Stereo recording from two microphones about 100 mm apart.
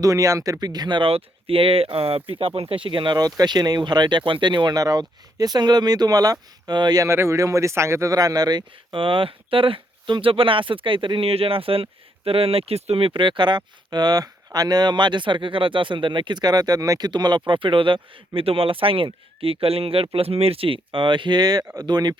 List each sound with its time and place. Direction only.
0.0 s speech: 35° right (ahead or behind)
7.1 s speech: 25° right (ahead or behind); by 8.6 s 40° right (ahead or behind)
8.9 s speech: 60° right (ahead or behind)